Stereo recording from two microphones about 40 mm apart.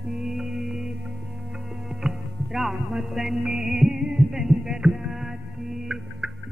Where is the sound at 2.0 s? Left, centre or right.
Centre.